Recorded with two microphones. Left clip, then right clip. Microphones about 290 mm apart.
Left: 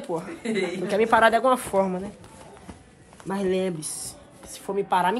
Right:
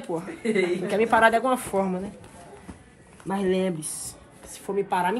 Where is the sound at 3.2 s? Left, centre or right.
Centre.